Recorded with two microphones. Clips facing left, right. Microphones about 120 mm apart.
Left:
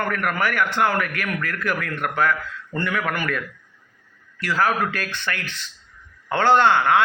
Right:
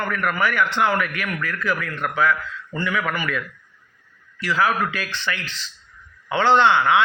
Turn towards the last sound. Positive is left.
turn(degrees=45)  # may be behind; listen again after turning